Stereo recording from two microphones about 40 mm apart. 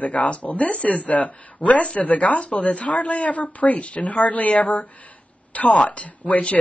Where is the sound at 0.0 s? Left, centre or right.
Left.